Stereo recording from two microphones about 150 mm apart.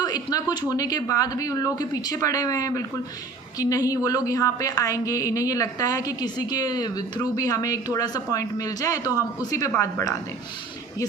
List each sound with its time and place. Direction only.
0.0 s a woman's voice: 25° left (ahead or behind)